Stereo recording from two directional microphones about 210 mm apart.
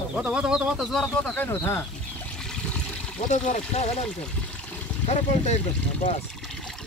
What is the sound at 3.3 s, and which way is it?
Speech, 35° left (ahead or behind).